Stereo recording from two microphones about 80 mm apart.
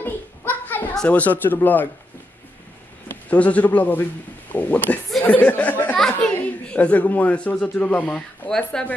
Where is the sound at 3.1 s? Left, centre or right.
Centre.